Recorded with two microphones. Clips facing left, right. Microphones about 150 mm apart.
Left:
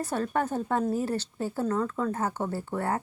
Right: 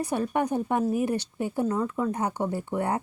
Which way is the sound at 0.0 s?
15° right (ahead or behind).